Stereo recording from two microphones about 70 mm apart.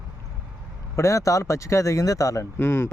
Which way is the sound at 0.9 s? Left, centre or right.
Left.